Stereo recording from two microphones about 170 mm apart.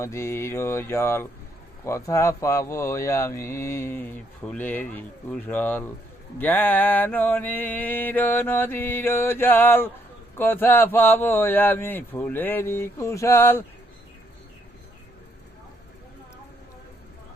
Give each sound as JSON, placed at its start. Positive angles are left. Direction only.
{"t": 0.0, "sound": "speech", "side_deg": 15}